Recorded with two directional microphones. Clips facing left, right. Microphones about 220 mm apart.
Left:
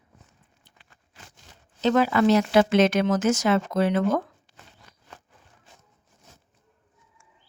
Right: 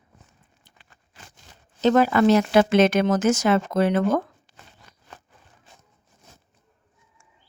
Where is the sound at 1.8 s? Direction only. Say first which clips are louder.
Right 3 dB; 45° right (ahead or behind).